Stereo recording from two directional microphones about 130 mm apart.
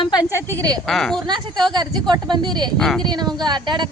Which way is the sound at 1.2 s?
35° right (ahead or behind).